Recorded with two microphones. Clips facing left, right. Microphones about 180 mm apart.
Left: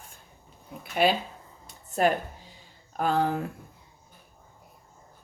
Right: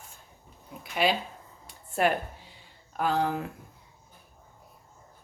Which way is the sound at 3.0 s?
45° left (ahead or behind).